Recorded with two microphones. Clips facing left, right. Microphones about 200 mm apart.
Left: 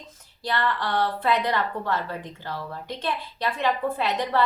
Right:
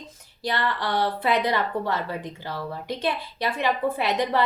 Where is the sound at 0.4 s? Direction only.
15° right (ahead or behind).